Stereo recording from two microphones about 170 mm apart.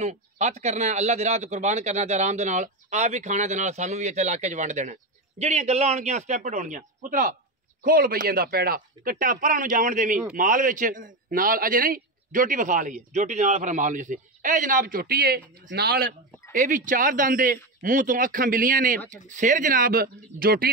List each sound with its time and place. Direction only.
0.0 s a man's voice: 40° right (ahead or behind); by 16.1 s 65° right (ahead or behind)
16.5 s a man's voice: 50° right (ahead or behind)